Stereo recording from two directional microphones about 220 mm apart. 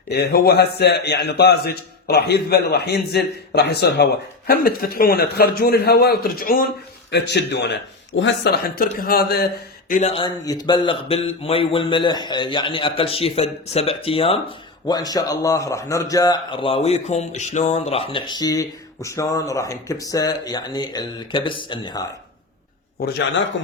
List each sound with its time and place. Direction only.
0.1 s a man's voice: 45° left (ahead or behind)
9.9 s a man's voice: 30° left (ahead or behind)
23.0 s a man's voice: 45° left (ahead or behind)